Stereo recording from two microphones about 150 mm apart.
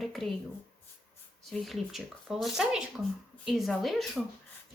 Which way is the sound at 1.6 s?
Centre (ahead or behind).